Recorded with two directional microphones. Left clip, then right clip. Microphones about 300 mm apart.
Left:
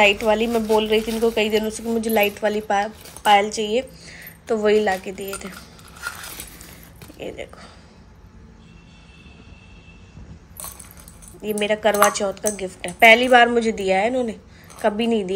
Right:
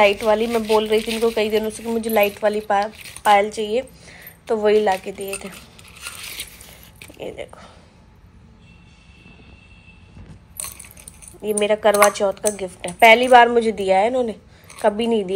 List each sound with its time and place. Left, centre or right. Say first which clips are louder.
0.0 s speech: right 1 dB; centre
7.2 s speech: right 1 dB; centre
11.4 s speech: right 3 dB; centre